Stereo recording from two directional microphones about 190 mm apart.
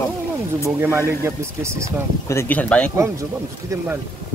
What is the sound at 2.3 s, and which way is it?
Speech, 10° left (ahead or behind).